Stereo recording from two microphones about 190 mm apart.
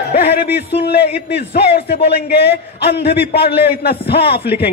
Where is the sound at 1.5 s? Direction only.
60° left (ahead or behind).